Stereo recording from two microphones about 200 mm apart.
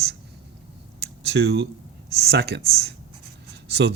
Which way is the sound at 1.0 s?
55° right (ahead or behind).